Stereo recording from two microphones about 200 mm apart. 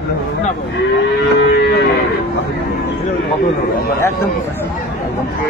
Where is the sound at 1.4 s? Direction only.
55° left (ahead or behind).